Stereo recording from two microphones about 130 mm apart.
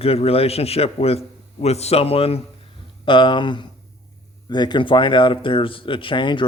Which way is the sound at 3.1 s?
40° left (ahead or behind).